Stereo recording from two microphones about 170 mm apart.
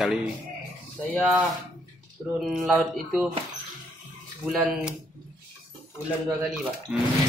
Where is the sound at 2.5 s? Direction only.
5° right (ahead or behind).